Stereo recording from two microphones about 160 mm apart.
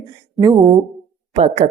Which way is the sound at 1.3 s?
45° right (ahead or behind).